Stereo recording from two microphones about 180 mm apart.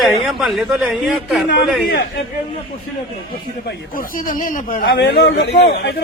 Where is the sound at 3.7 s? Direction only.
50° left (ahead or behind).